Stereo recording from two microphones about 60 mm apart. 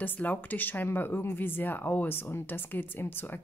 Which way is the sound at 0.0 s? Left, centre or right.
Left.